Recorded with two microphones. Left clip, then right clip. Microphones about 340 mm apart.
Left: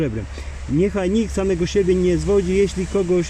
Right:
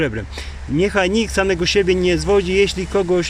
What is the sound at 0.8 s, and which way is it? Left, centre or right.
Speech, right.